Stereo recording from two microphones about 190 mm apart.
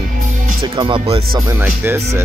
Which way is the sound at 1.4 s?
15° right (ahead or behind).